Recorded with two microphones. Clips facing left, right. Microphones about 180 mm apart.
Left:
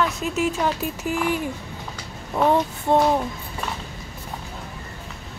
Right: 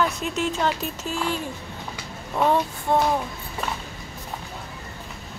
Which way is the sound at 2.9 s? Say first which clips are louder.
Left 3 dB; 20° left (ahead or behind).